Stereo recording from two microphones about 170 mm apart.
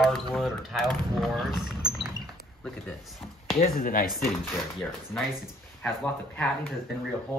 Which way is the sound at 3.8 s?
55° left (ahead or behind).